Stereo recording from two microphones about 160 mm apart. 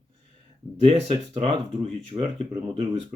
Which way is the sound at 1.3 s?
40° right (ahead or behind).